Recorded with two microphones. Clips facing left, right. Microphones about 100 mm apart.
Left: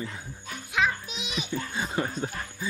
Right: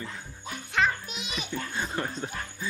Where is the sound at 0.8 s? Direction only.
Centre (ahead or behind).